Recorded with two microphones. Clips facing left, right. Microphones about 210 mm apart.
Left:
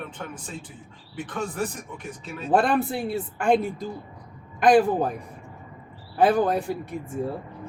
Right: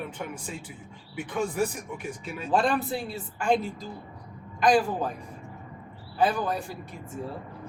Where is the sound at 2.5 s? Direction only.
55° left (ahead or behind).